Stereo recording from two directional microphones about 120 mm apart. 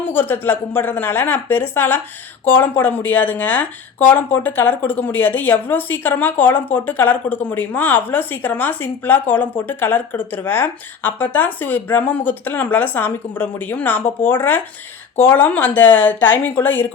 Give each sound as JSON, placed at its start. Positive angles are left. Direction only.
{"t": 0.0, "sound": "speech", "side_deg": 15}